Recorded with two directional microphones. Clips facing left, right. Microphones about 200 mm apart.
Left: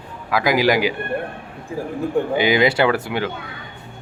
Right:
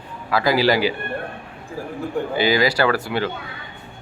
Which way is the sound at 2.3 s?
20° left (ahead or behind).